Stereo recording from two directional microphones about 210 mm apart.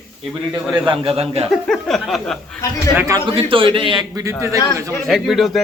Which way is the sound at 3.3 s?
25° right (ahead or behind).